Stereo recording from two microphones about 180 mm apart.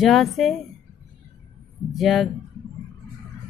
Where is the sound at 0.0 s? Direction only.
Centre (ahead or behind).